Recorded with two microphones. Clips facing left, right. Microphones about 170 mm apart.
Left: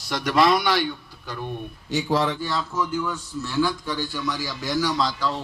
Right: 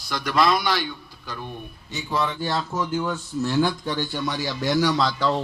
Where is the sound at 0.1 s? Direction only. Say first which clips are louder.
Left 2 dB; 70° left (ahead or behind).